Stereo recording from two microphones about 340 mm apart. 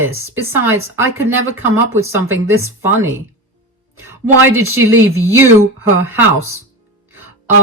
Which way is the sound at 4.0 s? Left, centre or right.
Centre.